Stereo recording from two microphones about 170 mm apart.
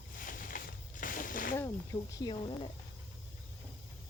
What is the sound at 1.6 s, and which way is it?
Speech, 20° left (ahead or behind).